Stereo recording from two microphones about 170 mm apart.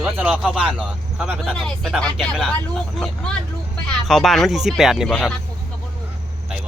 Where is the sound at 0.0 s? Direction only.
5° right (ahead or behind).